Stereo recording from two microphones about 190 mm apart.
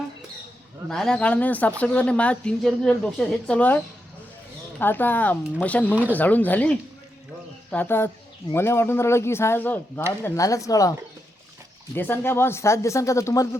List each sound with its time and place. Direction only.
0.9 s a woman's voice: centre (ahead or behind)
5.9 s speech: 10° right (ahead or behind)
6.1 s a woman's voice: 10° left (ahead or behind)
11.9 s a woman's voice: 10° left (ahead or behind)